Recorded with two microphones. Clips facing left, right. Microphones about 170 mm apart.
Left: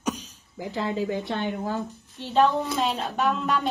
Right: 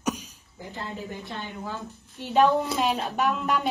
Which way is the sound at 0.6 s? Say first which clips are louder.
Left 8 dB; 90° left.